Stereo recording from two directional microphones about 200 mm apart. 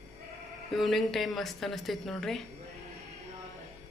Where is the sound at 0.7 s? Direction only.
Centre (ahead or behind).